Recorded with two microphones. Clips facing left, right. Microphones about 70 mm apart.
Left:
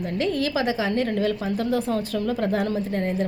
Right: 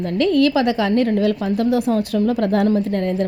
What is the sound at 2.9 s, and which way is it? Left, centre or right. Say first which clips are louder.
Speech: right 5 dB; right.